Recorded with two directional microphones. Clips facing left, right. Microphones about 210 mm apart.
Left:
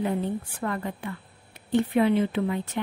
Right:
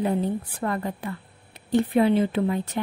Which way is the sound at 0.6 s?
35° right (ahead or behind).